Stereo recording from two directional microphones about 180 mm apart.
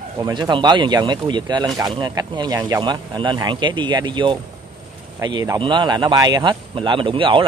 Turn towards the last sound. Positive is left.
turn(degrees=-30)  # may be behind; listen again after turning